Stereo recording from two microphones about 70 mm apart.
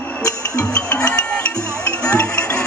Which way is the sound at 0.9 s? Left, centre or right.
Centre.